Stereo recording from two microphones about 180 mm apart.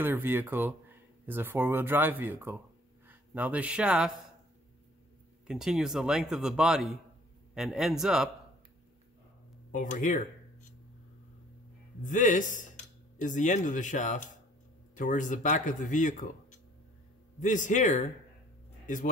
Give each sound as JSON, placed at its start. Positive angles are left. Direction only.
{"t": 0.0, "sound": "speech", "side_deg": -10}
{"t": 5.5, "sound": "speech", "side_deg": -5}
{"t": 9.7, "sound": "speech", "side_deg": 45}
{"t": 12.0, "sound": "speech", "side_deg": 45}